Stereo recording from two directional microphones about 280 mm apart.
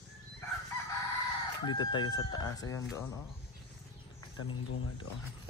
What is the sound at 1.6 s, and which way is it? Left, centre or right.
Speech, centre.